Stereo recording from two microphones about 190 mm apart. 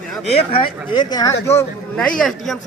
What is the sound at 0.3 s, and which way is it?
Speech, 30° left (ahead or behind).